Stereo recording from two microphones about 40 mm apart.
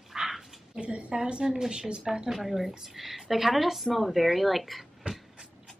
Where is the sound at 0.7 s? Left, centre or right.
Right.